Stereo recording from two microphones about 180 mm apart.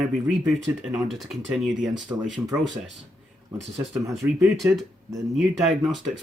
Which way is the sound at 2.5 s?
20° right (ahead or behind).